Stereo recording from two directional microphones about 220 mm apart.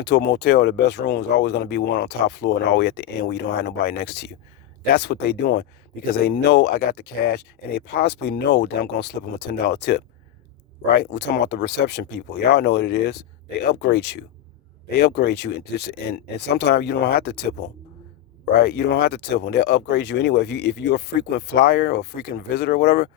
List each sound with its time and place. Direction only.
0.0 s speech: 50° left (ahead or behind)
18.5 s speech: 45° left (ahead or behind)